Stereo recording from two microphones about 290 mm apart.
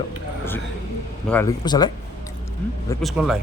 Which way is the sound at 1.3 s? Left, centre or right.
Centre.